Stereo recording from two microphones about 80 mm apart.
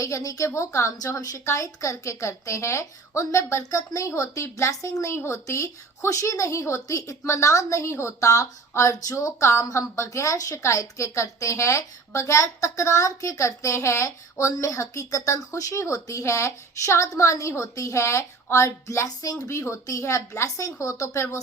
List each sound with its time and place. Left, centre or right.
0.0 s a woman's voice: left
19.0 s speech: left
19.5 s a woman's voice: left